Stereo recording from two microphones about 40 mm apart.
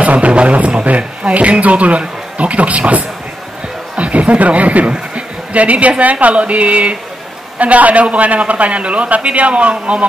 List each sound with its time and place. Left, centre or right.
0.0 s a man's voice: right